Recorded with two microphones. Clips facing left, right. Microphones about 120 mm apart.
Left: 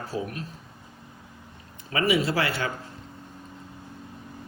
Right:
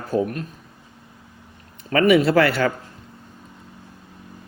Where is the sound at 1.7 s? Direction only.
65° right (ahead or behind).